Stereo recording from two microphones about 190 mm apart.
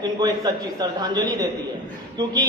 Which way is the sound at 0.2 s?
20° right (ahead or behind).